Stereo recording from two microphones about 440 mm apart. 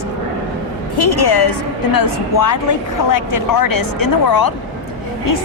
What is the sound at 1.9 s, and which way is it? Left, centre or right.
Speech, left.